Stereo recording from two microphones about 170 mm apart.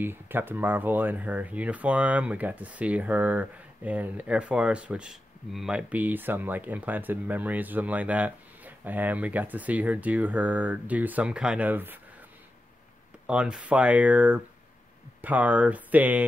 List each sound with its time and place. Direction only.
0.0 s speech: 10° right (ahead or behind)
13.3 s speech: 5° right (ahead or behind)